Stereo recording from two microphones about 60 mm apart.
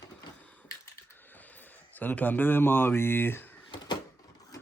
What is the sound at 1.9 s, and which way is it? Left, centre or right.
Speech, left.